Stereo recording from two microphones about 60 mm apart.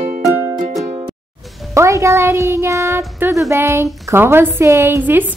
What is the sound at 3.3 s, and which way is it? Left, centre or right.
Speech, right.